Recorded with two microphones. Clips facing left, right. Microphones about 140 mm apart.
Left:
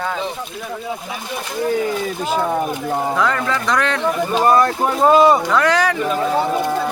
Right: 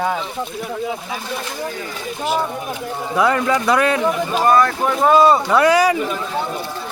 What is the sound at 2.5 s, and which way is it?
Speech, 55° left (ahead or behind).